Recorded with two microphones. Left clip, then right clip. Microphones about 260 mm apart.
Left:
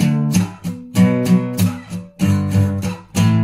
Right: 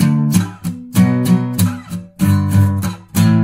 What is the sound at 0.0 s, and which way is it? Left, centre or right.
Music, right.